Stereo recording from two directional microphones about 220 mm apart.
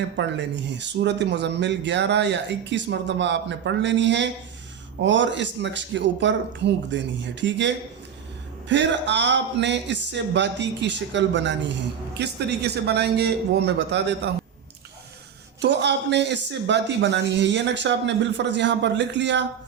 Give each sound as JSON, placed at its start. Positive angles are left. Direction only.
{"t": 0.2, "sound": "speech", "side_deg": -55}
{"t": 8.7, "sound": "speech", "side_deg": -55}
{"t": 15.6, "sound": "speech", "side_deg": -50}